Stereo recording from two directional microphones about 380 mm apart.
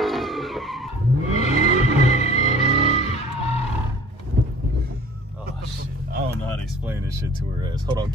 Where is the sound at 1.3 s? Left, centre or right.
Centre.